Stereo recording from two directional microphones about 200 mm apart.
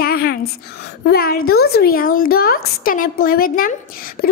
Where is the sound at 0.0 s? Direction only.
50° left (ahead or behind).